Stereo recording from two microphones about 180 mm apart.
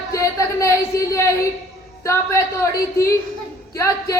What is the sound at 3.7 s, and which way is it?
Speech, 15° left (ahead or behind).